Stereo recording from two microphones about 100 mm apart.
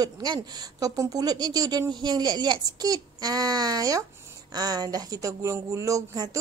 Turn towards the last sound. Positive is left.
turn(degrees=-35)  # may be behind; listen again after turning